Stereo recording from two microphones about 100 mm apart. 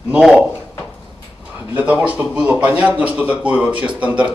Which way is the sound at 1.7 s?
15° right (ahead or behind).